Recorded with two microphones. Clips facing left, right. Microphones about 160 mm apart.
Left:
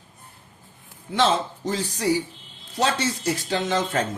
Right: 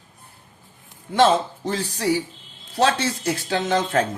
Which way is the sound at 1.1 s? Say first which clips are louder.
Right 4 dB; 50° right (ahead or behind).